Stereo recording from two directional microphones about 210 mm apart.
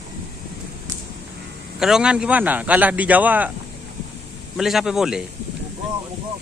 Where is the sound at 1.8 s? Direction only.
5° right (ahead or behind).